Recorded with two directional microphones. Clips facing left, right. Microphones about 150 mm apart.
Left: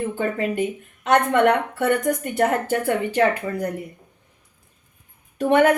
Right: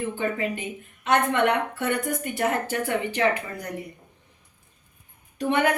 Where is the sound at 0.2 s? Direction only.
45° left (ahead or behind).